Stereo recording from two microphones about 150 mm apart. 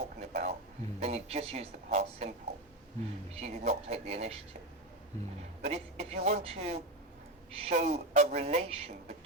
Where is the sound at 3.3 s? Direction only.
45° right (ahead or behind).